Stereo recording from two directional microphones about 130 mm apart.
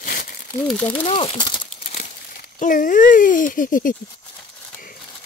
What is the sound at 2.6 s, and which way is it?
Speech, 90° left.